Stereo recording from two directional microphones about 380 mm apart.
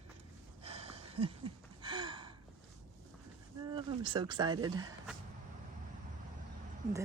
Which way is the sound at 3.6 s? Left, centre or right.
Centre.